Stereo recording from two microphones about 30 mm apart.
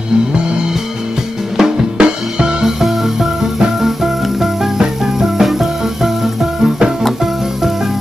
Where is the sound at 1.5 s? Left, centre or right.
Centre.